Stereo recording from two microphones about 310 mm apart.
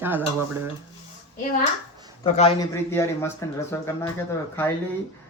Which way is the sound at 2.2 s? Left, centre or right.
Left.